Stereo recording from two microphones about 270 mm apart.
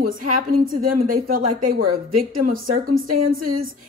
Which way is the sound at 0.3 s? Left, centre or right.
Right.